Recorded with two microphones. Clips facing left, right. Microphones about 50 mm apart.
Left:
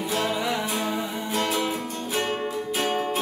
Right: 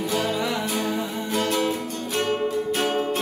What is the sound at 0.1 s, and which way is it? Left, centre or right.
Music, centre.